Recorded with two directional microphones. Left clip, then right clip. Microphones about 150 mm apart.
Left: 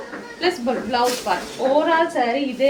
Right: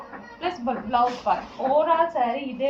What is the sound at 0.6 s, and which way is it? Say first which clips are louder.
A woman's voice: right 1 dB; 35° left (ahead or behind).